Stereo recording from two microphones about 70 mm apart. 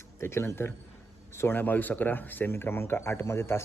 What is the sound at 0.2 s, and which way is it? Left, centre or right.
Speech, left.